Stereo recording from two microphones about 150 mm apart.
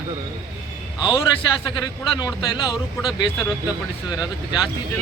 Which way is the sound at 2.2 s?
30° left (ahead or behind).